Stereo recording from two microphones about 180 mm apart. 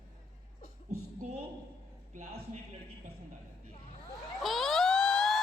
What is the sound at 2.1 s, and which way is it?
Speech, 40° right (ahead or behind).